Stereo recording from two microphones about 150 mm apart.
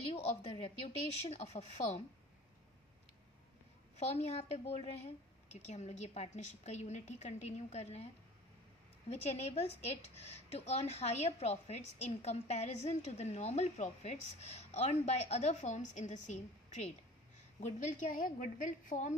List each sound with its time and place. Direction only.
0.1 s a sound: 35° left (ahead or behind)
1.3 s a woman's voice: 50° left (ahead or behind)
4.1 s a woman's voice: 45° left (ahead or behind)
9.1 s a woman's voice: 45° left (ahead or behind)